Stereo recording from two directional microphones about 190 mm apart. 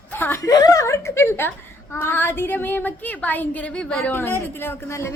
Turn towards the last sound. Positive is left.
turn(degrees=15)  # may be behind; listen again after turning